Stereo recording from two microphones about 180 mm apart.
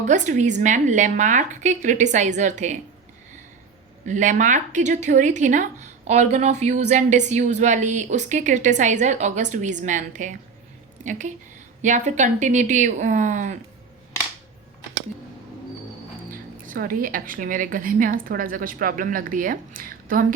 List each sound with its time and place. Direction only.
0.0 s speech: 40° right (ahead or behind)
4.0 s speech: 45° right (ahead or behind)
16.3 s speech: 50° right (ahead or behind)